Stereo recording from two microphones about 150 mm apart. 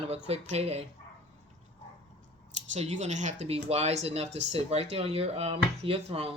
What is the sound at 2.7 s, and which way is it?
Speech, 50° right (ahead or behind).